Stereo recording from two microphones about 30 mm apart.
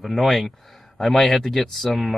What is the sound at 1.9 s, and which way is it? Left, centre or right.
Speech, centre.